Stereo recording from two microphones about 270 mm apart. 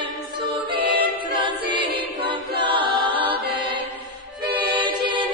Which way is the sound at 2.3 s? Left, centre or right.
Centre.